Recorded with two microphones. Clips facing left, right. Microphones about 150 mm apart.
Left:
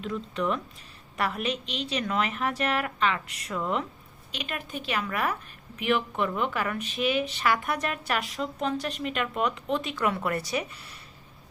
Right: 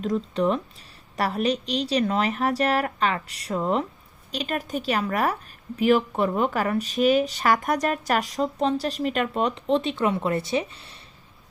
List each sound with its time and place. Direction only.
0.0 s a woman's voice: 35° right (ahead or behind)